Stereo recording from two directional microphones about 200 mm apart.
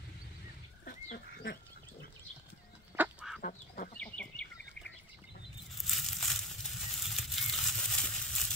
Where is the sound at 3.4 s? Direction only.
45° left (ahead or behind).